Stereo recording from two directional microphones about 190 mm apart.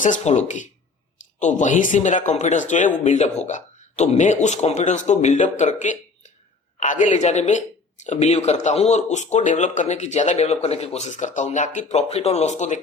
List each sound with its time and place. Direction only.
0.0 s speech: 40° left (ahead or behind)